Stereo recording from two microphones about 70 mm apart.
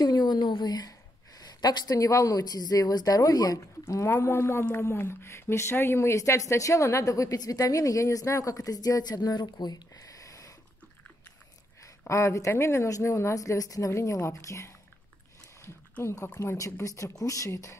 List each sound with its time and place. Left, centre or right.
0.0 s a sound: left
2.0 s speech: left
3.8 s speech: left
12.1 s speech: left
16.0 s speech: left